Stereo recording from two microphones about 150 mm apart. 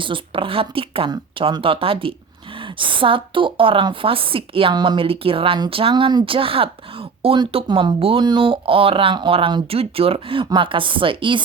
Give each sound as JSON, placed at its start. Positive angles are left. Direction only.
{"t": 0.0, "sound": "a woman's voice", "side_deg": -35}